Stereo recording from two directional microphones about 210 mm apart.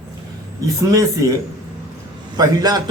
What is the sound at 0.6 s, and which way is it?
Speech, 15° right (ahead or behind).